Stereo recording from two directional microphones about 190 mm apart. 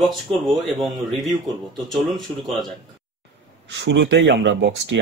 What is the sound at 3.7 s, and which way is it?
Speech, 70° right (ahead or behind).